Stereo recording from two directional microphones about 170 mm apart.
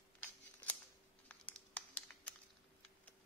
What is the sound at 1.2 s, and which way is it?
Crumpling, 10° left (ahead or behind).